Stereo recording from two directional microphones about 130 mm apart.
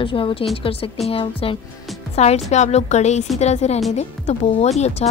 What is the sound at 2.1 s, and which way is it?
A woman's voice, 55° left (ahead or behind).